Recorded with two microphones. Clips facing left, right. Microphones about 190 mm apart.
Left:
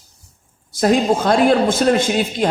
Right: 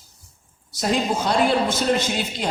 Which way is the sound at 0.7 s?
50° left (ahead or behind).